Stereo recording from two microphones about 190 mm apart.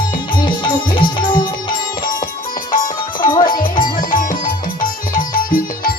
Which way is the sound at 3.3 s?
20° left (ahead or behind).